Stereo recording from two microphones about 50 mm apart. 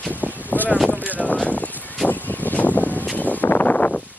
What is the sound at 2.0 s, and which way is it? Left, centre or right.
Vehicle, left.